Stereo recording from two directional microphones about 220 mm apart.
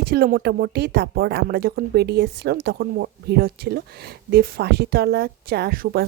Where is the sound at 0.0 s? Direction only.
45° right (ahead or behind).